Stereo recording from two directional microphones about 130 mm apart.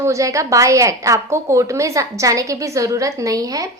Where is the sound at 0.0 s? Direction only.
25° right (ahead or behind).